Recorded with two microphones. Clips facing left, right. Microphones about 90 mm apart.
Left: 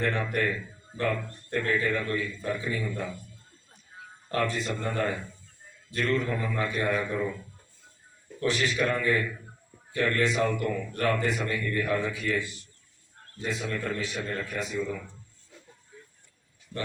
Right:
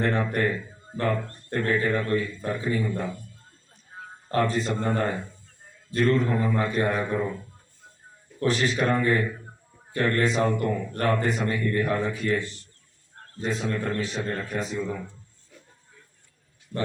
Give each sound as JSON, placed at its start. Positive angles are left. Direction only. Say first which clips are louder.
{"t": 0.0, "sound": "speech", "louder": "right 3 dB", "side_deg": -30}
{"t": 3.9, "sound": "a man's voice", "louder": "right 4 dB", "side_deg": -35}
{"t": 12.4, "sound": "a man's voice", "louder": "right 1 dB", "side_deg": 10}
{"t": 13.3, "sound": "a man's voice", "louder": "right 4 dB", "side_deg": -30}